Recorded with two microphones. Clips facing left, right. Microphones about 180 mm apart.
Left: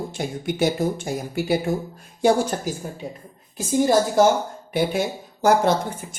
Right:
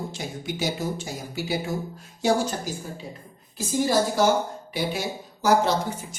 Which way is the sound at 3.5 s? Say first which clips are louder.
Left 4 dB; 50° left (ahead or behind).